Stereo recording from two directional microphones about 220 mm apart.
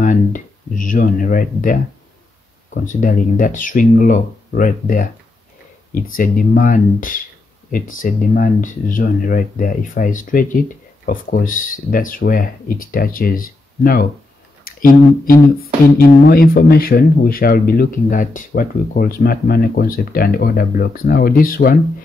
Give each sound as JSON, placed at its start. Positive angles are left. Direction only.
{"t": 0.0, "sound": "speech", "side_deg": 35}
{"t": 6.1, "sound": "speech", "side_deg": 40}